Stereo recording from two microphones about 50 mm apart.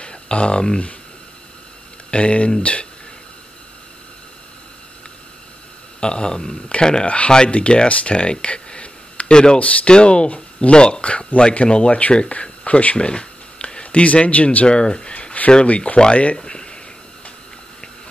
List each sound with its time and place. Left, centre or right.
0.0 s speech: left
2.0 s speech: left
5.9 s speech: centre
16.3 s speech: centre